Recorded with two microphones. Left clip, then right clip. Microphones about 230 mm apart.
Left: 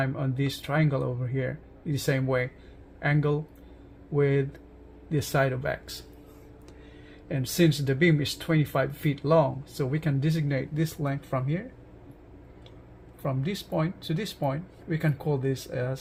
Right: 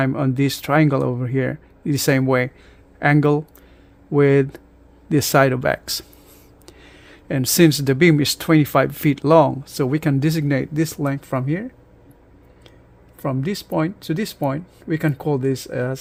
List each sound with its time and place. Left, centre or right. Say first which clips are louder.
0.0 s speech: right 10 dB; right
7.3 s speech: right 10 dB; right
13.2 s speech: right 8 dB; right